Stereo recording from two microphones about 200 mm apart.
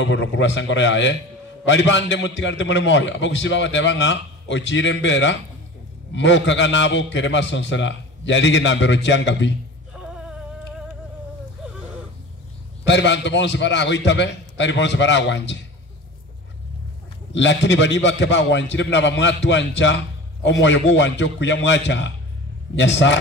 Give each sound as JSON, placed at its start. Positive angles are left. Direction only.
{"t": 0.0, "sound": "a man's voice", "side_deg": 65}
{"t": 9.9, "sound": "music", "side_deg": -5}
{"t": 12.8, "sound": "a man's voice", "side_deg": 60}
{"t": 17.3, "sound": "a man's voice", "side_deg": 65}